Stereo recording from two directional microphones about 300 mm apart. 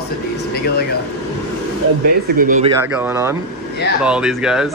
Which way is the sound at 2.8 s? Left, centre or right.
Centre.